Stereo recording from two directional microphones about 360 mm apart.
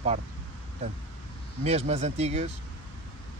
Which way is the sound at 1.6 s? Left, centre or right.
Centre.